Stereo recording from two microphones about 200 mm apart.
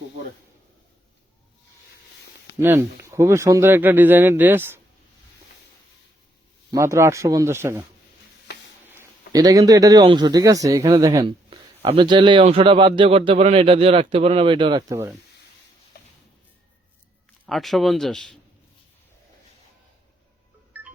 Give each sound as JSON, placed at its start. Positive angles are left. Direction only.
{"t": 2.6, "sound": "speech", "side_deg": -10}
{"t": 6.7, "sound": "speech", "side_deg": -15}
{"t": 8.9, "sound": "a man's voice", "side_deg": -15}
{"t": 17.4, "sound": "speech", "side_deg": 0}
{"t": 20.7, "sound": "music", "side_deg": -10}